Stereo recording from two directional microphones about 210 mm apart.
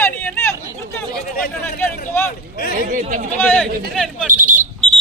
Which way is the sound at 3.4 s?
5° left (ahead or behind).